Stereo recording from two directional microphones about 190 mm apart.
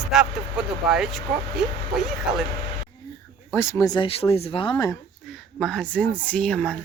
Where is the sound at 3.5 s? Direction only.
15° left (ahead or behind).